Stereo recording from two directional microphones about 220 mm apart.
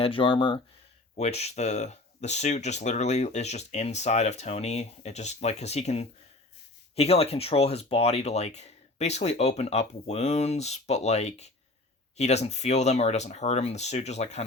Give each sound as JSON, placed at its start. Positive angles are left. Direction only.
{"t": 0.0, "sound": "speech", "side_deg": 25}